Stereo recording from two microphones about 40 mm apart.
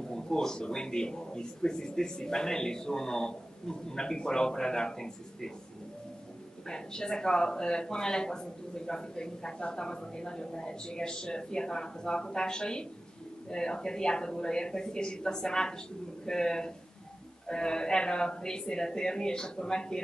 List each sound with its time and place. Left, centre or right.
0.1 s speech: centre
6.7 s speech: centre